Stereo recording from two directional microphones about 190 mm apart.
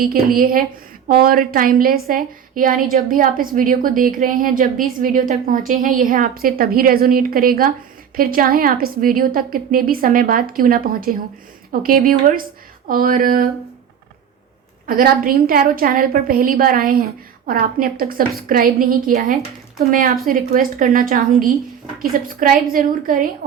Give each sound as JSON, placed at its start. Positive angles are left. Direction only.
{"t": 0.0, "sound": "a woman's voice", "side_deg": -50}
{"t": 14.8, "sound": "a woman's voice", "side_deg": -50}
{"t": 22.7, "sound": "a woman's voice", "side_deg": -45}